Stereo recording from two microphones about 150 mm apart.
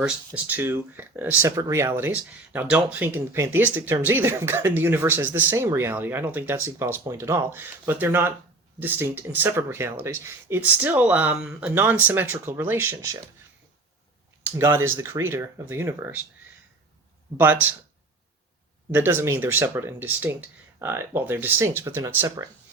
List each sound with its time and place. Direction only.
0.3 s speech: 10° right (ahead or behind)
14.4 s speech: 15° right (ahead or behind)
17.3 s speech: 10° right (ahead or behind)
18.9 s speech: 15° right (ahead or behind)